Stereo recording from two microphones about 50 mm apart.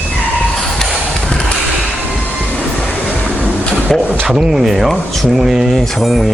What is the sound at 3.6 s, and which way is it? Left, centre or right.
Printer, left.